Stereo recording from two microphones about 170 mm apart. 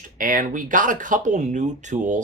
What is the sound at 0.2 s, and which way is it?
Speech, 55° right (ahead or behind).